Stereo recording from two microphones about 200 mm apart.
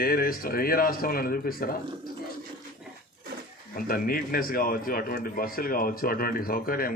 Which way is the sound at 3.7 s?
45° left (ahead or behind).